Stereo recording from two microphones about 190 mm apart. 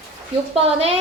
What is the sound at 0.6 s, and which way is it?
Speech, 30° right (ahead or behind).